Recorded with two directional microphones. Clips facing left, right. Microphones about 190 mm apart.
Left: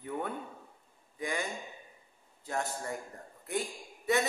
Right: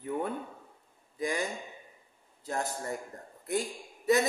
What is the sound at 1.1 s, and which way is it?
Speech, 35° right (ahead or behind).